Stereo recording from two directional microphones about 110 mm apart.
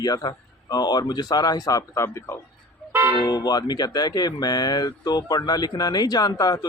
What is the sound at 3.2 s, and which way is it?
A man's voice, 35° left (ahead or behind).